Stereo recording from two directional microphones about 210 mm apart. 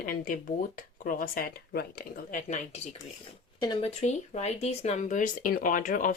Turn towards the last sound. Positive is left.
turn(degrees=40)  # may be behind; listen again after turning